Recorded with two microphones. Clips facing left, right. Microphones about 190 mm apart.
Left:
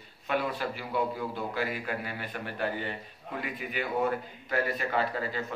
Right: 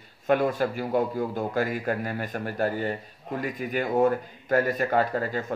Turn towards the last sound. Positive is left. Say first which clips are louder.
# right 5 dB
turn(degrees=-45)  # may be behind; listen again after turning